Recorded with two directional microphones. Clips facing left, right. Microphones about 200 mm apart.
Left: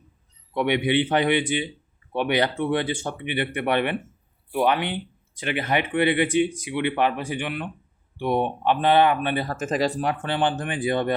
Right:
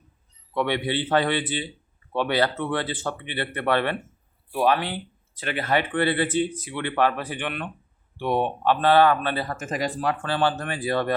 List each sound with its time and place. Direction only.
0.5 s speech: 15° left (ahead or behind)
9.5 s speech: 35° left (ahead or behind)
10.0 s speech: 20° left (ahead or behind)